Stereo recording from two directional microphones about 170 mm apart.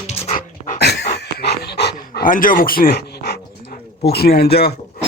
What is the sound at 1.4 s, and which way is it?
Pant, 75° left (ahead or behind).